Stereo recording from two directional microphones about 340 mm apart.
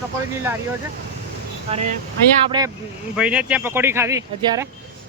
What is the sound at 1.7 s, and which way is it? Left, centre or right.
Speech, centre.